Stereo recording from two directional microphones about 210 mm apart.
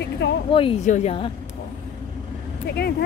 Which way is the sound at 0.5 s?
30° left (ahead or behind).